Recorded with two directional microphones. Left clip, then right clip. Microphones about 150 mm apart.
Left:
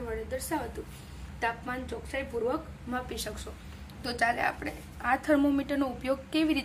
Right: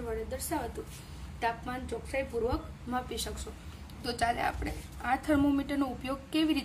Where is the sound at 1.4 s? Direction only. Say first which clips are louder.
Left 1 dB; centre (ahead or behind).